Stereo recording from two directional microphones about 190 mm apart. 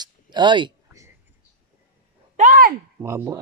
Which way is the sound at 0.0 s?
25° right (ahead or behind).